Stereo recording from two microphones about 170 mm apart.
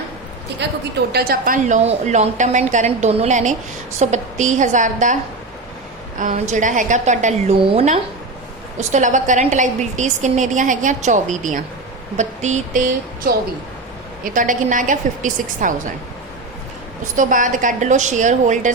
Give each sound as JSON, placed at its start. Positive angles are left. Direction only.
{"t": 0.6, "sound": "a woman's voice", "side_deg": -80}
{"t": 6.1, "sound": "a woman's voice", "side_deg": -45}
{"t": 17.2, "sound": "a woman's voice", "side_deg": -50}